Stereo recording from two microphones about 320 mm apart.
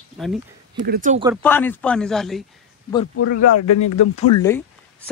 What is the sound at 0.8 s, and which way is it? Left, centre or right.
Speech, right.